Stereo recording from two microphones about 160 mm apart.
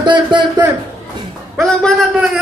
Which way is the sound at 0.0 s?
30° right (ahead or behind).